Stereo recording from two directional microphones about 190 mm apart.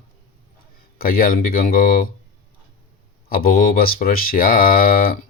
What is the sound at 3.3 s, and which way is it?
Speech, 50° left (ahead or behind).